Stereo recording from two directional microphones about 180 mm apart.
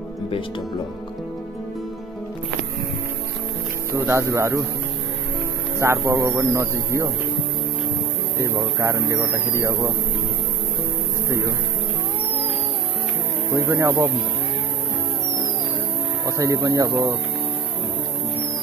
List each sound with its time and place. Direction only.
3.9 s a man's voice: 15° right (ahead or behind)
5.8 s a man's voice: 15° right (ahead or behind)
8.4 s a man's voice: 15° right (ahead or behind)
11.2 s speech: 15° right (ahead or behind)
13.7 s a man's voice: 15° right (ahead or behind)
16.3 s a man's voice: 15° right (ahead or behind)